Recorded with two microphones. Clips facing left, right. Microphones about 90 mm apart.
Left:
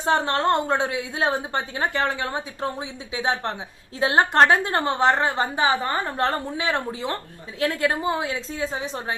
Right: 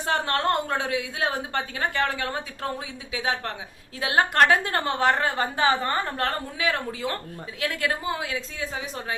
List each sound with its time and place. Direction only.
0.0 s a woman's voice: 25° left (ahead or behind)